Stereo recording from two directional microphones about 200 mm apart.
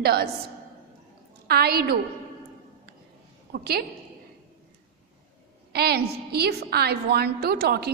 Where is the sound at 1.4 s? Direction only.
50° right (ahead or behind).